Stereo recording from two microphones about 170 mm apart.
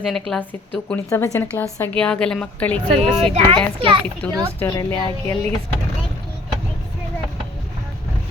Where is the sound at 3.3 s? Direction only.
30° right (ahead or behind).